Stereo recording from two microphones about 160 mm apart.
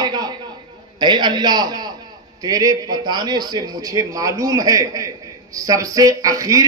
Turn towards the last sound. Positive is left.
turn(degrees=-20)  # may be behind; listen again after turning